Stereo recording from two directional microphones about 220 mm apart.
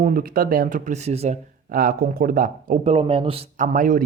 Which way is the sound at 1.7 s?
40° right (ahead or behind).